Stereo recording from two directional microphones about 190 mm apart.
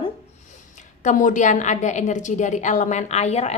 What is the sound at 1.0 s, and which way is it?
A woman's voice, 40° left (ahead or behind).